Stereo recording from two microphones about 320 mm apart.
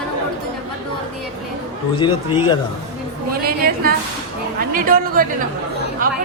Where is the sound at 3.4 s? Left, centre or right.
Right.